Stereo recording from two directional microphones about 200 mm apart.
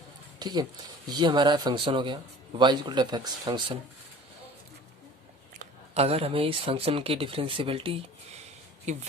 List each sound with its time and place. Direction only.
0.3 s speech: 20° right (ahead or behind)
5.5 s speech: 30° right (ahead or behind)